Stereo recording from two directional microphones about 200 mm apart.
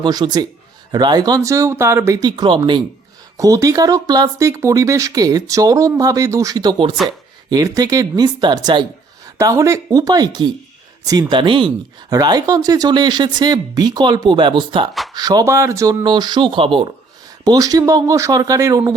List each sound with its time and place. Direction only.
0.0 s speech: 20° right (ahead or behind)